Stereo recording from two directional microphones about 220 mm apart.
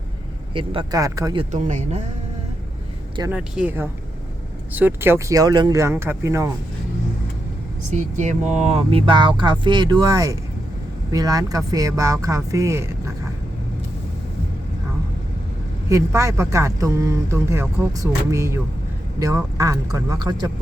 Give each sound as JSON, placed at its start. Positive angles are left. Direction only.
{"t": 0.5, "sound": "speech", "side_deg": -20}
{"t": 1.5, "sound": "speech", "side_deg": -35}
{"t": 3.3, "sound": "a man's voice", "side_deg": -5}
{"t": 7.9, "sound": "a man's voice", "side_deg": -30}
{"t": 15.9, "sound": "a man's voice", "side_deg": -15}